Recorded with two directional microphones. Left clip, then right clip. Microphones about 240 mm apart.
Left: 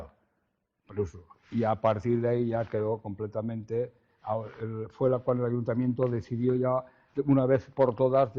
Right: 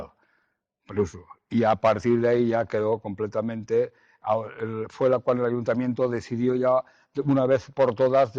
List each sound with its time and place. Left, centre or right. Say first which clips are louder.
0.9 s speech: right 7 dB; right